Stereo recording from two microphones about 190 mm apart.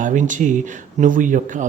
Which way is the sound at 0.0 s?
40° right (ahead or behind).